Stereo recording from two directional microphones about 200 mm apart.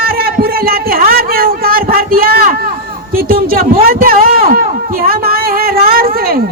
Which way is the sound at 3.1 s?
50° right (ahead or behind).